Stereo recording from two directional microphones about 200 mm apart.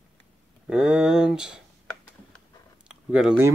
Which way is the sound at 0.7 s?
5° right (ahead or behind).